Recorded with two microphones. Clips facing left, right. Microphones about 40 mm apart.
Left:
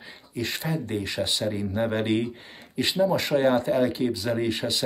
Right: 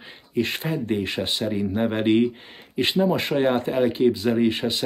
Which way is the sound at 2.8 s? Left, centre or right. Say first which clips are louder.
Right 2 dB; right.